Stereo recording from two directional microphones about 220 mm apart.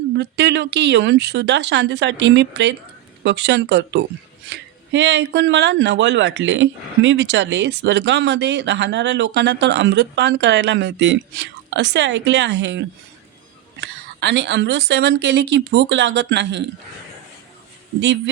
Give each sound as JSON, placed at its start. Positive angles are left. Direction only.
{"t": 0.2, "sound": "a woman's voice", "side_deg": -50}